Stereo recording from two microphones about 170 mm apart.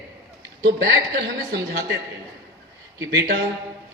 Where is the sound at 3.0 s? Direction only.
90° right.